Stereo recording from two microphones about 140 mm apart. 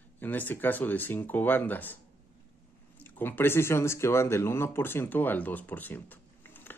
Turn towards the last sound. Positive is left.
turn(degrees=15)  # may be behind; listen again after turning